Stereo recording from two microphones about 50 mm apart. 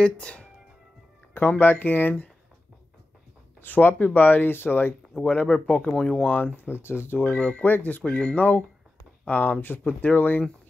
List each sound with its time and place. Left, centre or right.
0.0 s speech: left
1.3 s speech: left
3.6 s speech: left
5.2 s speech: left
5.5 s speech: centre
6.2 s speech: left
6.7 s speech: left
7.2 s speech: centre
7.6 s speech: left
8.0 s speech: centre
8.4 s speech: left